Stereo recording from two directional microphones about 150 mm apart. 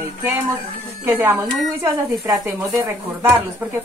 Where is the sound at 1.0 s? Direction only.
15° right (ahead or behind).